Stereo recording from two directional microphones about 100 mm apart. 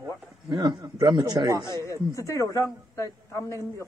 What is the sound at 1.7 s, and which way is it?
A man's voice, 30° left (ahead or behind).